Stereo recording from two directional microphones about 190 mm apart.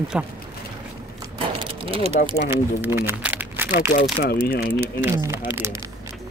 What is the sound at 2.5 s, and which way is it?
Speech, 10° right (ahead or behind).